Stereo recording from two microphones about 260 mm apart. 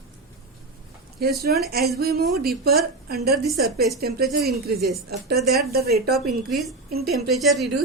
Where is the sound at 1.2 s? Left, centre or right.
Right.